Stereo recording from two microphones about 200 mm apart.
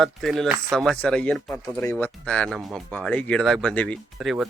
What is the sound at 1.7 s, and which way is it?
Speech, 10° left (ahead or behind).